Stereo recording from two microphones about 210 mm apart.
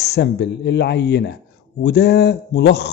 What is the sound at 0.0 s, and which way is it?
Speech, 50° left (ahead or behind).